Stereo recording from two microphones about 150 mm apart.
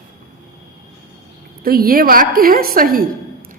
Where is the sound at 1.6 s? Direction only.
80° right.